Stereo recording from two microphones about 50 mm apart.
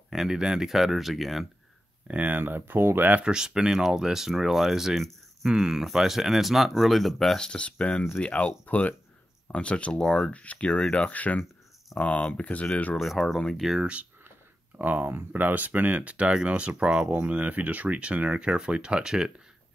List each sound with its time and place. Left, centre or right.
0.1 s speech: centre
2.0 s speech: right
2.4 s speech: right
3.1 s speech: right; by 7.3 s centre
7.3 s speech: centre
9.9 s speech: centre
10.3 s speech: left
13.0 s speech: centre
13.7 s speech: right
14.8 s speech: right; by 19.3 s centre